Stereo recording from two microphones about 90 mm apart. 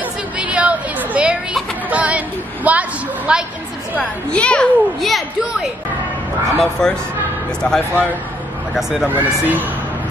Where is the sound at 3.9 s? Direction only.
15° left (ahead or behind).